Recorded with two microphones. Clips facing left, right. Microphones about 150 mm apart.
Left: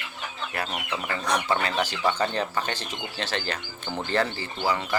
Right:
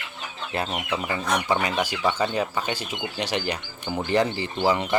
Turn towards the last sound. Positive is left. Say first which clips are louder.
# right 4 dB
turn(degrees=-20)  # may be behind; listen again after turning